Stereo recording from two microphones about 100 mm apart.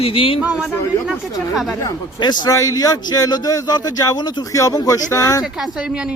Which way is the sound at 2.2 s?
45° left (ahead or behind).